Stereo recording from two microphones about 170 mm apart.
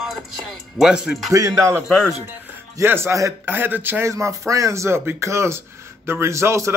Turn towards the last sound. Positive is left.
turn(degrees=-15)  # may be behind; listen again after turning